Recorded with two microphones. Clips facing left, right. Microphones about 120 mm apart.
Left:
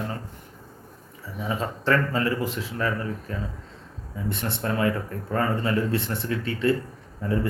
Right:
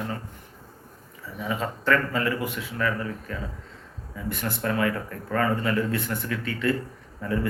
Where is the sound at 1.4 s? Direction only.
30° left (ahead or behind).